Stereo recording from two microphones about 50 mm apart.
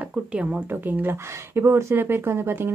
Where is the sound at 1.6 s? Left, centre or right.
Right.